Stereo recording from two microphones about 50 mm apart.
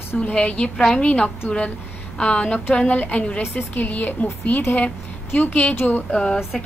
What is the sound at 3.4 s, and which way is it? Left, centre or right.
Speech, left.